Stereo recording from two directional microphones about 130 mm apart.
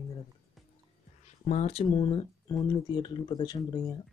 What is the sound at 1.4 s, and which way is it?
Speech, 55° left (ahead or behind).